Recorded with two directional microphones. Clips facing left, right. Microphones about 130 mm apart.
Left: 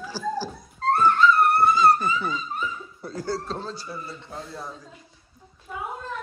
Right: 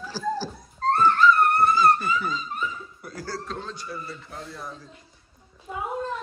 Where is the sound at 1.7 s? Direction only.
25° left (ahead or behind).